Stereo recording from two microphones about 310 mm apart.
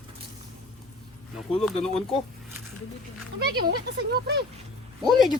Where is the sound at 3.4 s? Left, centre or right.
Right.